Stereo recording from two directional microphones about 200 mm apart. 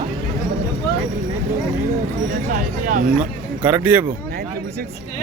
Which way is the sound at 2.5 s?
40° right (ahead or behind).